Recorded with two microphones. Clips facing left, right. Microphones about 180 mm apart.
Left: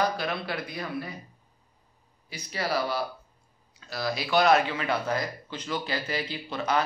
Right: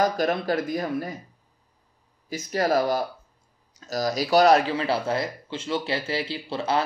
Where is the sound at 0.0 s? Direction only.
45° right (ahead or behind).